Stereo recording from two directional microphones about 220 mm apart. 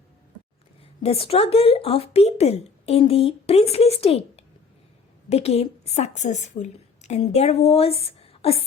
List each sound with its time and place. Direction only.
1.0 s a woman's voice: 25° left (ahead or behind)